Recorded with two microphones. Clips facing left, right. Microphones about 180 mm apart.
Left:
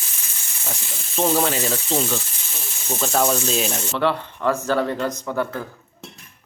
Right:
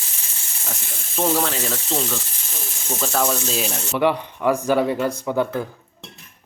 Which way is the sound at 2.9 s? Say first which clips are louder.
Left 2 dB; 5° left (ahead or behind).